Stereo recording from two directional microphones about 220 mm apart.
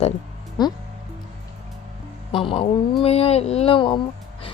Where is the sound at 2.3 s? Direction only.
25° left (ahead or behind).